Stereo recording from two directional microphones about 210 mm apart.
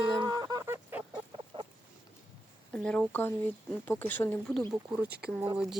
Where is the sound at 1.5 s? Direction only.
25° right (ahead or behind).